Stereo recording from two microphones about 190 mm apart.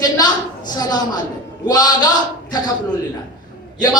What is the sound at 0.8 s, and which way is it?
Speech, 20° left (ahead or behind).